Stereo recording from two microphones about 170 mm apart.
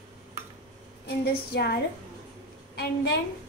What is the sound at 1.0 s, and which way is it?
A woman's voice, 70° left (ahead or behind).